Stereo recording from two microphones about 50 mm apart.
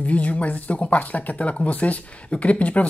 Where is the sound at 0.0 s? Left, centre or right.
Left.